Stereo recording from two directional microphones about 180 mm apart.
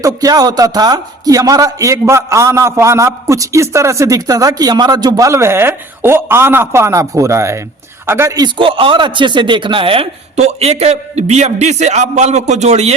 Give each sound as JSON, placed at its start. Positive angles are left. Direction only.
{"t": 0.0, "sound": "a man's voice", "side_deg": -20}
{"t": 8.5, "sound": "speech", "side_deg": -30}